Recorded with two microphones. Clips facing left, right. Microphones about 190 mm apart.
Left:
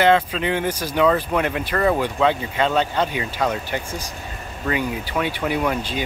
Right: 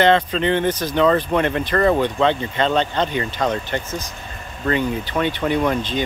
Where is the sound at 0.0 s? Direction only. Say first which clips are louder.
Right 1 dB; 5° left (ahead or behind).